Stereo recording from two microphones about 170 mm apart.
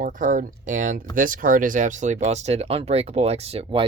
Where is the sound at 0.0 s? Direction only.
50° right (ahead or behind).